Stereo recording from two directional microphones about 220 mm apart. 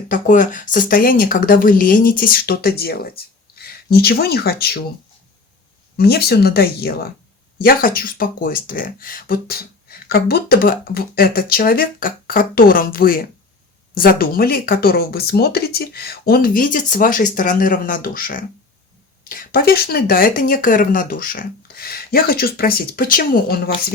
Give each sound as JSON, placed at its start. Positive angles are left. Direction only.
{"t": 0.1, "sound": "speech", "side_deg": 35}
{"t": 6.0, "sound": "speech", "side_deg": 45}